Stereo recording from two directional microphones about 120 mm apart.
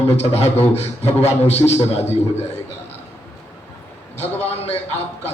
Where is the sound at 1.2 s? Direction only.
60° left (ahead or behind).